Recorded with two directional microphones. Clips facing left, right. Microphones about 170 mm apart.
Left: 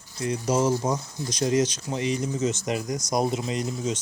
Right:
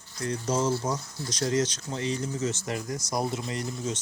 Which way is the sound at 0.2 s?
10° left (ahead or behind).